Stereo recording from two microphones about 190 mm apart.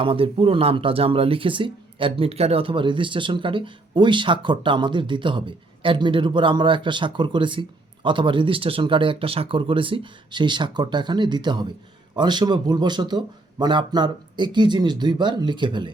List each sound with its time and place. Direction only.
0.0 s speech: 30° right (ahead or behind)